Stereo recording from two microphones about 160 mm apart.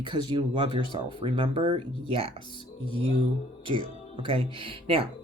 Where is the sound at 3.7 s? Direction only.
35° right (ahead or behind).